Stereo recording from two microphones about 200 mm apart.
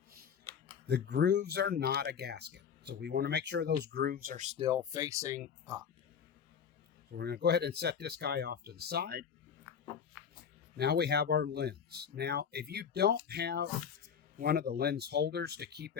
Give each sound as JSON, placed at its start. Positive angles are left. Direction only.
{"t": 0.9, "sound": "speech", "side_deg": -55}
{"t": 7.1, "sound": "speech", "side_deg": -55}
{"t": 10.8, "sound": "speech", "side_deg": -55}